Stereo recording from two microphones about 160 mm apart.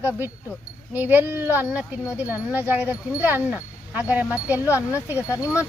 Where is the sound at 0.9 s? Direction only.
10° right (ahead or behind).